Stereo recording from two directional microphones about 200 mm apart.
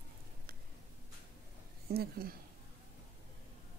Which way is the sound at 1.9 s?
50° right (ahead or behind).